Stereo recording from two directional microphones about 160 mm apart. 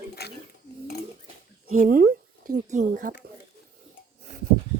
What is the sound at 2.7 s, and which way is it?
Speech, 50° right (ahead or behind).